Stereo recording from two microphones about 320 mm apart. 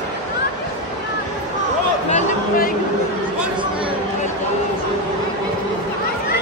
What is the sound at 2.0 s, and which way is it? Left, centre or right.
Speech, left.